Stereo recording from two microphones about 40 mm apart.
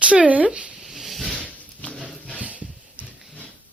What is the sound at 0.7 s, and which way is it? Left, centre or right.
Dog, centre.